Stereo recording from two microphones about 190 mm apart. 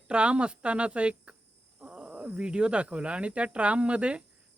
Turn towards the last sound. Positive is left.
turn(degrees=-5)  # may be behind; listen again after turning